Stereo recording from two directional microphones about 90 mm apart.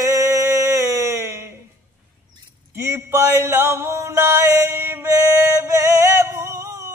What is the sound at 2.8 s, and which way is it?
Music, 30° right (ahead or behind).